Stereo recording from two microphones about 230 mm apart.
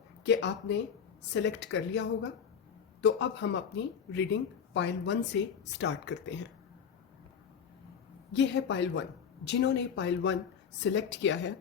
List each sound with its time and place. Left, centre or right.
0.3 s speech: left
8.3 s speech: left